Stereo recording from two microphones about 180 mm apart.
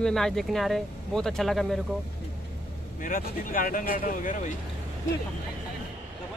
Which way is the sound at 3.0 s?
50° left (ahead or behind).